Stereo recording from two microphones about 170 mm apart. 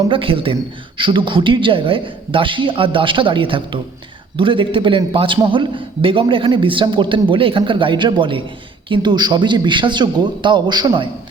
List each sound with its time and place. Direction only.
0.1 s a man's voice: 30° right (ahead or behind)